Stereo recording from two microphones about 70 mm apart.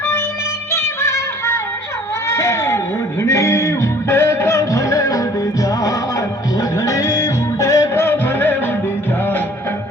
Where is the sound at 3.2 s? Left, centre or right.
Left.